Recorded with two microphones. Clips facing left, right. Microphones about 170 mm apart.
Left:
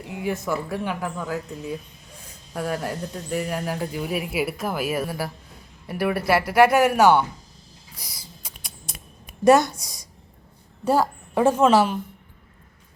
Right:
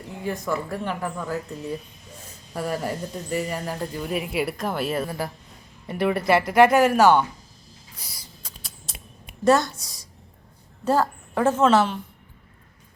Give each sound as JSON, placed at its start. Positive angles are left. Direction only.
{"t": 0.2, "sound": "speech", "side_deg": 5}
{"t": 7.9, "sound": "a sound", "side_deg": 10}
{"t": 9.4, "sound": "a woman's voice", "side_deg": 20}
{"t": 10.8, "sound": "speech", "side_deg": 10}